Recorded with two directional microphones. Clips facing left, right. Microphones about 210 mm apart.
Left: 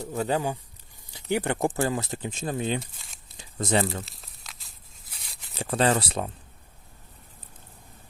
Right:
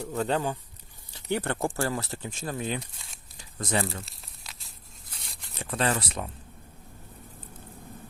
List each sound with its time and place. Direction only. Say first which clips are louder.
0.2 s speech: left 1 dB; 10° left (ahead or behind); by 2.8 s 25° left (ahead or behind)
2.9 s crumpling: even; centre (ahead or behind)
3.3 s a sound: left 4 dB; 25° left (ahead or behind)
3.8 s crumpling: left 4 dB; centre (ahead or behind)
5.1 s a sound: right 1 dB; centre (ahead or behind)
5.5 s speech: left 5 dB; 30° left (ahead or behind)